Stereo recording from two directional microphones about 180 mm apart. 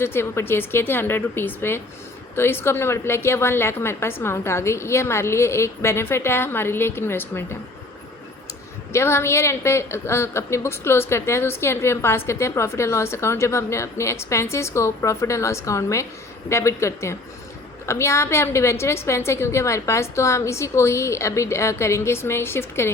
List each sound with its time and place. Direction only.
0.0 s a woman's voice: 15° left (ahead or behind)
8.9 s a woman's voice: 15° left (ahead or behind)